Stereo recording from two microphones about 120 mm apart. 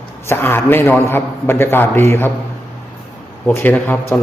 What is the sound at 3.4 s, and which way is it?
Speech, 15° left (ahead or behind).